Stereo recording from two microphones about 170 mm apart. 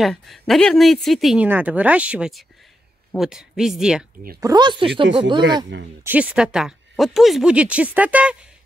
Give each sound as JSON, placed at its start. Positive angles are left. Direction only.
{"t": 0.0, "sound": "speech", "side_deg": 0}
{"t": 4.4, "sound": "speech", "side_deg": -25}
{"t": 6.0, "sound": "speech", "side_deg": -10}